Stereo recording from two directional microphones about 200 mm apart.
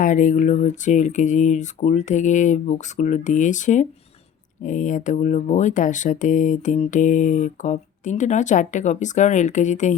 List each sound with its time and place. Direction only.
0.0 s speech: 40° left (ahead or behind)